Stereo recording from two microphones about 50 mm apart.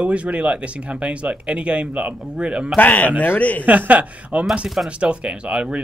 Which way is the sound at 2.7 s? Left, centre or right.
Left.